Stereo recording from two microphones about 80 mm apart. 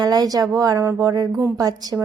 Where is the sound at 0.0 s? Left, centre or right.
Right.